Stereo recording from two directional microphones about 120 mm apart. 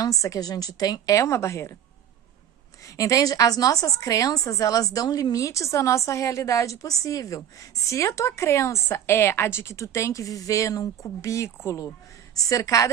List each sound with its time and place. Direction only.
0.0 s a woman's voice: 30° left (ahead or behind)
3.0 s a woman's voice: 30° left (ahead or behind)